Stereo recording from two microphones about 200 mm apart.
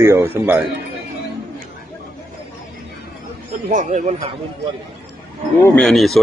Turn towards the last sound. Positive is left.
turn(degrees=0)  # may be behind; listen again after turning